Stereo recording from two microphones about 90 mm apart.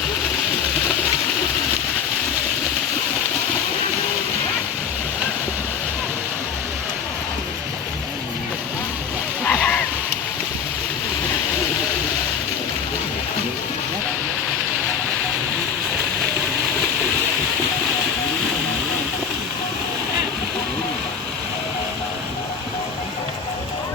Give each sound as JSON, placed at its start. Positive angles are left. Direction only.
{"t": 9.4, "sound": "splash", "side_deg": 15}